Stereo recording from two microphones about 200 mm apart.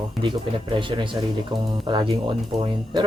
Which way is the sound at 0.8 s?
25° right (ahead or behind).